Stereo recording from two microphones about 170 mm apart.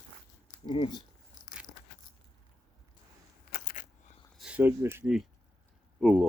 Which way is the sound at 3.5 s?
55° left (ahead or behind).